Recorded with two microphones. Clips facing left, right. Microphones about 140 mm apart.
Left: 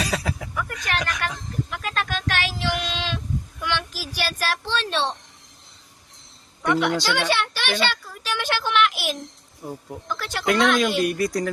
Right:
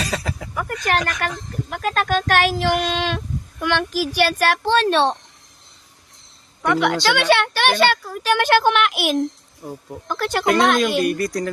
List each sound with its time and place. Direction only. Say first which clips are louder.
0.0 s speech: even; 5° left (ahead or behind)
0.9 s a sound: right 6 dB; 45° right (ahead or behind)
3.6 s a child's voice: right 10 dB; 55° right (ahead or behind)
6.7 s speech: right 3 dB; 90° right; by 9.1 s 60° right (ahead or behind)
9.6 s speech: right 1 dB; centre (ahead or behind)
10.1 s speech: right 8 dB; 50° right (ahead or behind)
11.0 s speech: right 2 dB; centre (ahead or behind)